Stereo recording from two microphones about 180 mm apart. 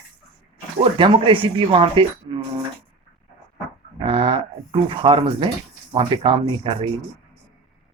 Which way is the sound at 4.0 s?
30° right (ahead or behind).